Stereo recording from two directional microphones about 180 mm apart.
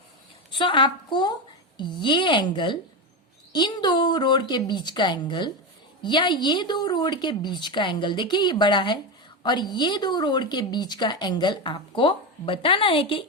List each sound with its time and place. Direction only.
0.5 s speech: 25° left (ahead or behind)